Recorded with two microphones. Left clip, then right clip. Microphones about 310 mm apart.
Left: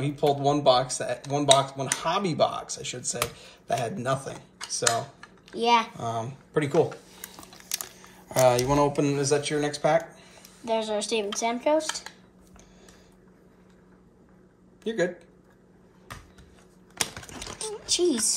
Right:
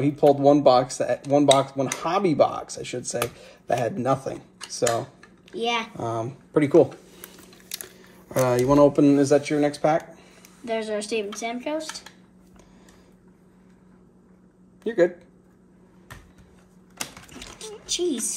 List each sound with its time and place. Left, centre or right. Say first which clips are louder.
0.0 s speech: right 7 dB; centre
5.2 s typing: left 1 dB; centre
5.9 s speech: right 3 dB; centre
8.3 s speech: right 1 dB; centre
10.6 s speech: even; centre
14.8 s speech: right 6 dB; centre
16.9 s typing: left 4 dB; left
17.9 s a woman's voice: left 1 dB; centre